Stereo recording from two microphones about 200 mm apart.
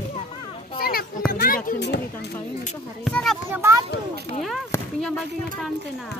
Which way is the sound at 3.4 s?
15° right (ahead or behind).